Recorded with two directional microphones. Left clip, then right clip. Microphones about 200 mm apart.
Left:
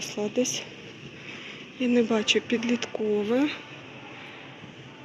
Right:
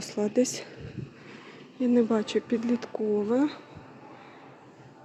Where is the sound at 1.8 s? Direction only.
25° right (ahead or behind).